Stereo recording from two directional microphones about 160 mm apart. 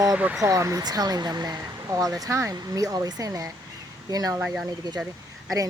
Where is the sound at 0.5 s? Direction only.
20° right (ahead or behind).